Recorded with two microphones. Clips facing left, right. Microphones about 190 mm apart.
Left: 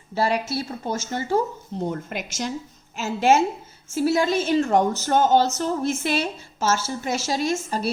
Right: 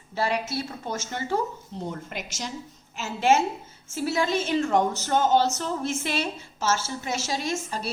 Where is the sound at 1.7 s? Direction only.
50° left (ahead or behind).